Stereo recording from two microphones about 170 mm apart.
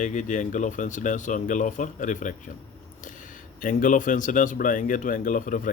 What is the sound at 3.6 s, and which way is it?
Speech, 50° left (ahead or behind).